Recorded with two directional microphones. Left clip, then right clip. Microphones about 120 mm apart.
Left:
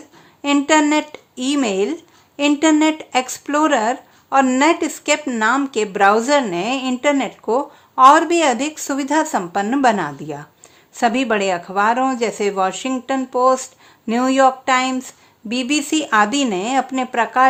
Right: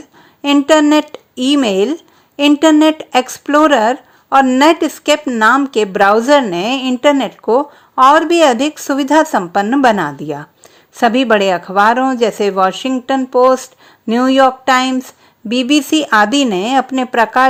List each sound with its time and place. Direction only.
0.4 s speech: 40° right (ahead or behind)